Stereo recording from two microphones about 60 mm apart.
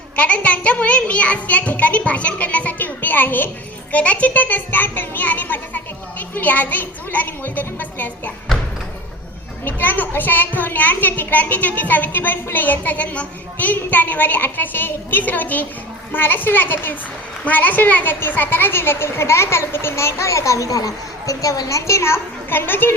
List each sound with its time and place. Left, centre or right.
0.2 s a child's voice: left
9.6 s a child's voice: left